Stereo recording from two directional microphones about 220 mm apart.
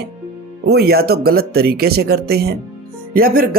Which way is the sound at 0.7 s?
45° right (ahead or behind).